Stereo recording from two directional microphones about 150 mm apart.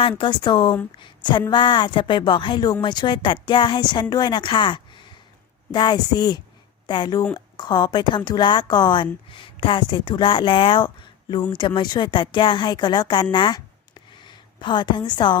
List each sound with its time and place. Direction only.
0.2 s a woman's voice: 30° left (ahead or behind)